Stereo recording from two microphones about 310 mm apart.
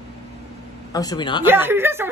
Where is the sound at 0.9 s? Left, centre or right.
Centre.